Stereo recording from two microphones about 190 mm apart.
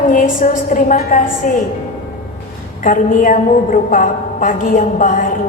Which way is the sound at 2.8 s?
45° left (ahead or behind).